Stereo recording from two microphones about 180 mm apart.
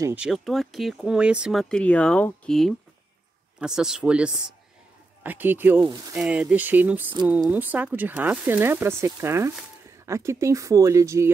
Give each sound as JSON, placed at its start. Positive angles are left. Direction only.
{"t": 0.0, "sound": "speech", "side_deg": -5}
{"t": 6.1, "sound": "speech", "side_deg": -5}